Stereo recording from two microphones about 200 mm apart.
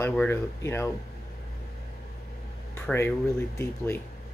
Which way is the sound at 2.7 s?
10° left (ahead or behind).